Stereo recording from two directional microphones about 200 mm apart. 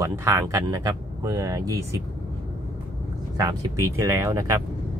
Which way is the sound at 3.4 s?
15° right (ahead or behind).